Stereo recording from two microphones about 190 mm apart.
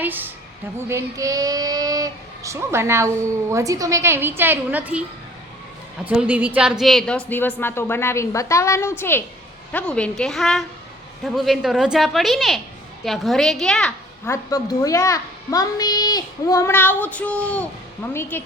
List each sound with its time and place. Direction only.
0.0 s speech: 10° right (ahead or behind)
6.1 s a child's voice: 5° right (ahead or behind)
14.3 s a child's voice: 15° left (ahead or behind)